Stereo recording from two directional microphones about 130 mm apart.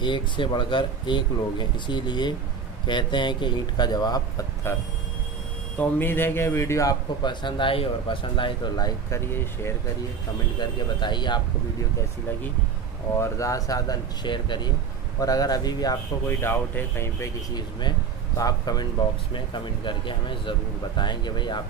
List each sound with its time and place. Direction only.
0.0 s speech: 40° left (ahead or behind)
4.7 s a man's voice: 20° left (ahead or behind)
9.2 s a man's voice: 20° left (ahead or behind)
10.6 s speech: 35° left (ahead or behind)
13.2 s a man's voice: 25° left (ahead or behind)
16.3 s a man's voice: 20° left (ahead or behind)
17.6 s speech: 35° left (ahead or behind)